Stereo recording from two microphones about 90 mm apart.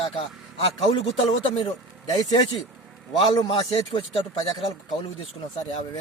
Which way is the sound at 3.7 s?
80° left.